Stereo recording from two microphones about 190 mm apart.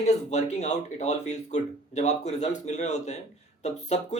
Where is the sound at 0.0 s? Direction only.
35° left (ahead or behind).